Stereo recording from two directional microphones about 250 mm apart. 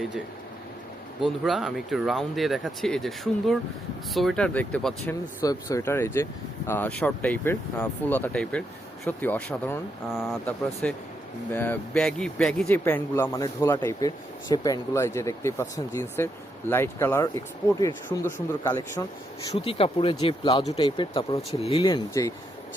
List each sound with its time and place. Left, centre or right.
1.2 s speech: centre
5.4 s speech: centre